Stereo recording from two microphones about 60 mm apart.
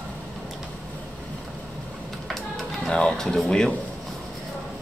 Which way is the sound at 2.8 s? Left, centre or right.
Centre.